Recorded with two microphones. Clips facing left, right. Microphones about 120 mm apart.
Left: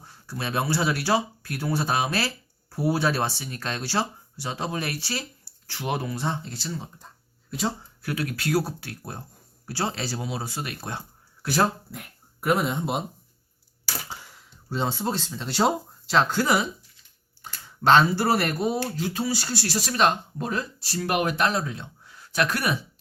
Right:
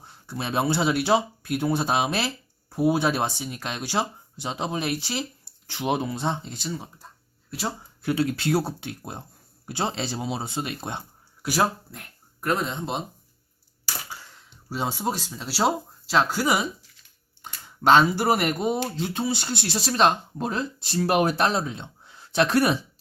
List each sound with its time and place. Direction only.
0.0 s speech: 20° right (ahead or behind); by 7.7 s centre (ahead or behind)
8.0 s speech: 25° right (ahead or behind)
11.4 s speech: 10° right (ahead or behind)
11.9 s speech: 5° left (ahead or behind)
14.7 s speech: 10° right (ahead or behind); by 22.8 s 25° right (ahead or behind)